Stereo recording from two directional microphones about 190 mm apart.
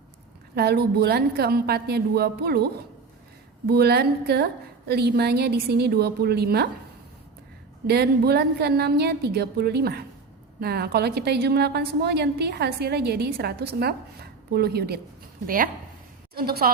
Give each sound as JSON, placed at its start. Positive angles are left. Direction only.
{"t": 0.5, "sound": "a woman's voice", "side_deg": -60}
{"t": 3.7, "sound": "a woman's voice", "side_deg": -55}
{"t": 7.9, "sound": "a woman's voice", "side_deg": -55}